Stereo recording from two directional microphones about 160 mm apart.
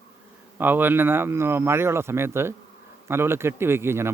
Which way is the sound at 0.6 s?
10° right (ahead or behind).